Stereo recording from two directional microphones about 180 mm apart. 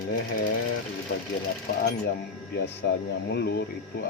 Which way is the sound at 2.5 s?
70° left (ahead or behind).